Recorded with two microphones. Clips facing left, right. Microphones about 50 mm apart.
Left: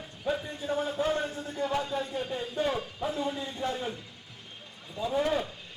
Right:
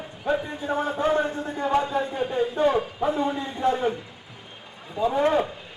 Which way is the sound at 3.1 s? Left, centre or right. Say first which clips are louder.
Right 6 dB; centre.